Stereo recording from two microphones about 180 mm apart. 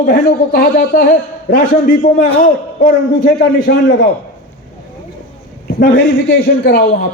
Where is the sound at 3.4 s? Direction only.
75° left (ahead or behind).